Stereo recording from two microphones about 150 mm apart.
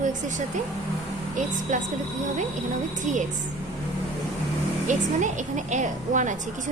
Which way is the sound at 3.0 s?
55° right (ahead or behind).